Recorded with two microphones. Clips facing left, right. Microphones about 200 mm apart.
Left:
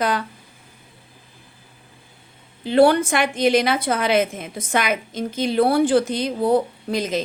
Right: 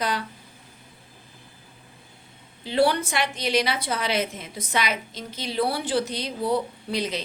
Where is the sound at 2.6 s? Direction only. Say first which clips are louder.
Left 7 dB; 50° left (ahead or behind).